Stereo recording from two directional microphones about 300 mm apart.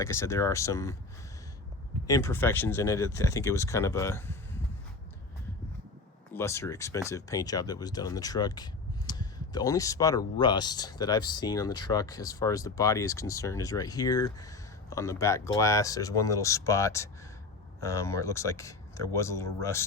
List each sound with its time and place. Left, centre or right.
0.0 s speech: centre
2.0 s speech: centre
6.3 s speech: centre